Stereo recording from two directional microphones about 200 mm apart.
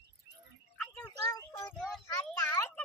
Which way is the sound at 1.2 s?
20° left (ahead or behind).